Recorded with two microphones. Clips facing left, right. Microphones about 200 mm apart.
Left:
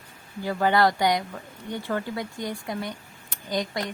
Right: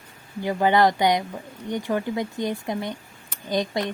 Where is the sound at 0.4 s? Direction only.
20° right (ahead or behind).